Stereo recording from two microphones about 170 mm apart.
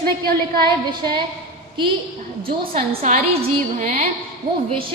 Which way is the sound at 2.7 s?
40° right (ahead or behind).